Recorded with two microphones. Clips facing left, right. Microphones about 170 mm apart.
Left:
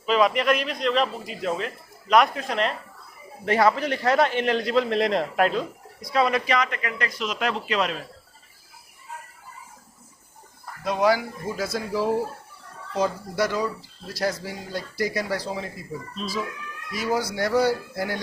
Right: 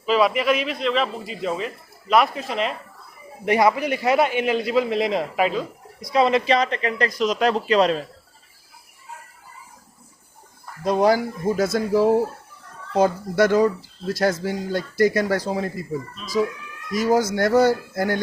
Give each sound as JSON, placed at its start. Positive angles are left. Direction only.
{"t": 0.0, "sound": "a man's voice", "side_deg": -5}
{"t": 3.4, "sound": "a man's voice", "side_deg": -15}
{"t": 6.1, "sound": "a man's voice", "side_deg": -20}
{"t": 10.8, "sound": "speech", "side_deg": -35}
{"t": 16.9, "sound": "speech", "side_deg": -45}